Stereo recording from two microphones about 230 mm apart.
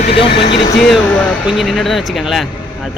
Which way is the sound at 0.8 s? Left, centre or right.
Centre.